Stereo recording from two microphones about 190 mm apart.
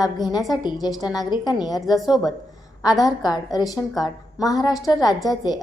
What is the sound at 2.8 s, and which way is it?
A woman's voice, 20° left (ahead or behind).